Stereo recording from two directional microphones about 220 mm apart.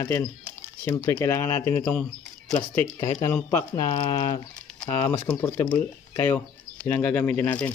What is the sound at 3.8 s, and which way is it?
Speech, 20° left (ahead or behind).